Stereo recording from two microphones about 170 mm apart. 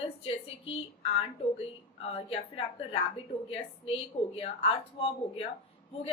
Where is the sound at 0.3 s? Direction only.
35° left (ahead or behind).